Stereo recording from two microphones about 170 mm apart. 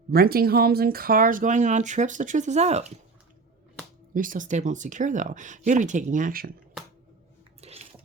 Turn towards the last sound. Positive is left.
turn(degrees=-40)  # may be behind; listen again after turning